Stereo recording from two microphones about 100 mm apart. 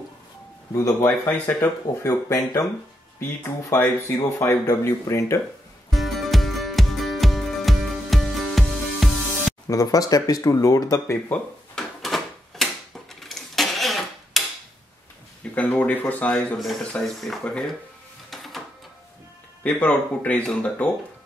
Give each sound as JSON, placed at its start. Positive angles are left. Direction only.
{"t": 0.7, "sound": "speech", "side_deg": 30}
{"t": 2.0, "sound": "speech", "side_deg": 35}
{"t": 3.2, "sound": "speech", "side_deg": 20}
{"t": 5.9, "sound": "music", "side_deg": 0}
{"t": 9.7, "sound": "speech", "side_deg": 35}
{"t": 11.7, "sound": "a sound", "side_deg": 0}
{"t": 13.2, "sound": "tick-tock", "side_deg": 0}
{"t": 15.5, "sound": "speech", "side_deg": 15}
{"t": 16.9, "sound": "speech", "side_deg": 0}
{"t": 18.3, "sound": "printer", "side_deg": 0}
{"t": 19.6, "sound": "speech", "side_deg": 15}